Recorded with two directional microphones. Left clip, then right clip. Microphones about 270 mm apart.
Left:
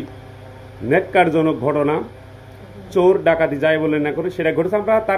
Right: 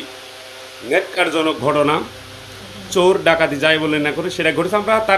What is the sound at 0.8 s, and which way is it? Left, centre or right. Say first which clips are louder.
A man's voice: left 2 dB; centre.